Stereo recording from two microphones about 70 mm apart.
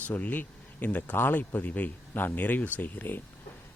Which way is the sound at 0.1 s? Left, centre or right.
Left.